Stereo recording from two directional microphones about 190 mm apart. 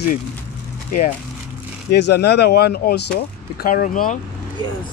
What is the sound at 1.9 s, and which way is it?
Speech, 55° left (ahead or behind).